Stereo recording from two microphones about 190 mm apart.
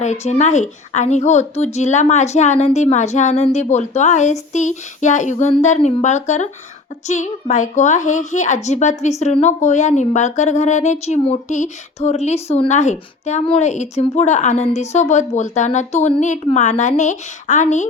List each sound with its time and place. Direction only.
0.0 s a child's voice: 35° left (ahead or behind)